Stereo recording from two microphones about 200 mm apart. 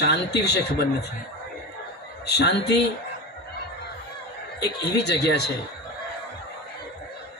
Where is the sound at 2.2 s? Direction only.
55° left (ahead or behind).